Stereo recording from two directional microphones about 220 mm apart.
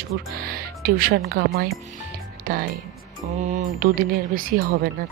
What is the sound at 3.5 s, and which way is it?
A woman's voice, 40° right (ahead or behind).